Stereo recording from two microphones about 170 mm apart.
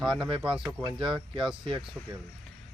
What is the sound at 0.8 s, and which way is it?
Speech, 30° right (ahead or behind).